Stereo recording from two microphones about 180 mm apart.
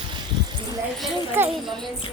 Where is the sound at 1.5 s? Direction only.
Centre (ahead or behind).